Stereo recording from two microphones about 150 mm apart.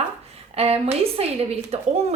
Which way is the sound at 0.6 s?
40° right (ahead or behind).